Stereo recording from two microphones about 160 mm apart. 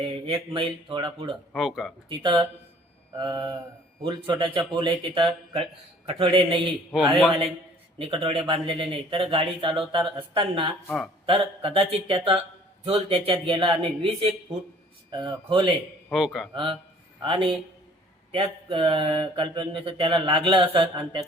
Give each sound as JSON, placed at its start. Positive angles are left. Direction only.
{"t": 0.0, "sound": "mantra", "side_deg": -35}
{"t": 1.5, "sound": "speech", "side_deg": 0}
{"t": 2.0, "sound": "speech", "side_deg": -30}
{"t": 4.0, "sound": "mantra", "side_deg": -30}
{"t": 7.9, "sound": "mantra", "side_deg": -35}
{"t": 10.8, "sound": "speech", "side_deg": 0}
{"t": 11.3, "sound": "mantra", "side_deg": -35}
{"t": 15.1, "sound": "speech", "side_deg": -30}
{"t": 16.1, "sound": "speech", "side_deg": 0}
{"t": 17.2, "sound": "mantra", "side_deg": -30}